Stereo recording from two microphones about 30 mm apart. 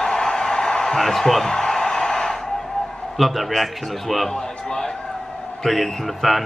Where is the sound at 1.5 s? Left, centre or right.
Left.